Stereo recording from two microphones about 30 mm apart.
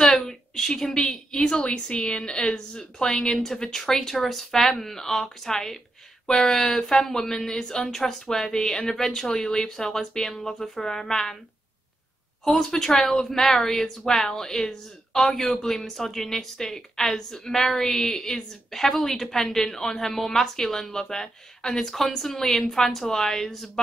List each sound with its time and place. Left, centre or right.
0.0 s a sound: centre
1.3 s a woman's voice: left
3.6 s a woman's voice: centre
12.5 s speech: centre
18.7 s speech: centre